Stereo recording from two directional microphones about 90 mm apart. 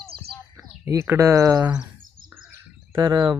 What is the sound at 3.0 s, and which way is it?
Speech, 50° right (ahead or behind).